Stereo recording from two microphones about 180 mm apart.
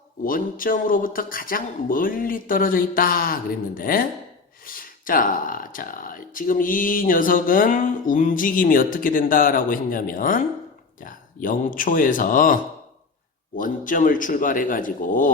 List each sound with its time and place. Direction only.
0.3 s speech: 50° left (ahead or behind)
13.6 s speech: 50° left (ahead or behind)